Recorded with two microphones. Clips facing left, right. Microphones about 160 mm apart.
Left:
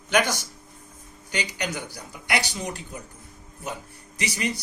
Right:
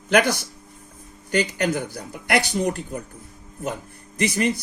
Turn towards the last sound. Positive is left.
turn(degrees=-50)  # may be behind; listen again after turning